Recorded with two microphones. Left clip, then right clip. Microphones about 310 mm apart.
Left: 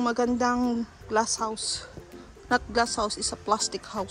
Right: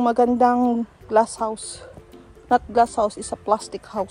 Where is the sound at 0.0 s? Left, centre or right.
Centre.